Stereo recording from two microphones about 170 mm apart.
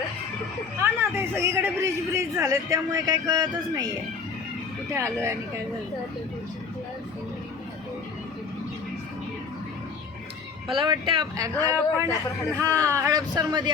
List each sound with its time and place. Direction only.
0.8 s speech: 15° right (ahead or behind)
4.9 s a man's voice: 15° right (ahead or behind)
10.8 s a man's voice: 30° right (ahead or behind)